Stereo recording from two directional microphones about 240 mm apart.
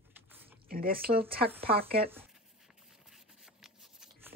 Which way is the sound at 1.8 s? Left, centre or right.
Right.